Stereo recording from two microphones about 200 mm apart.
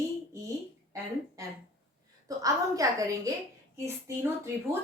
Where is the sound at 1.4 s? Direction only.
15° right (ahead or behind).